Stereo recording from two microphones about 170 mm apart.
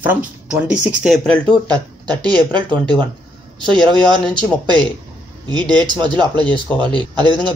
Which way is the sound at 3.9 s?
5° left (ahead or behind).